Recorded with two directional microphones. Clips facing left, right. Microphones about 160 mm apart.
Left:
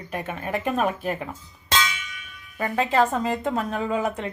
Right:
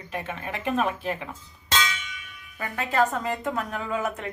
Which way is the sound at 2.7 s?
30° left (ahead or behind).